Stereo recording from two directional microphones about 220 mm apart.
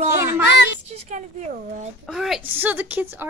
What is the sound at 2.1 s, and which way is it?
A woman's voice, centre (ahead or behind).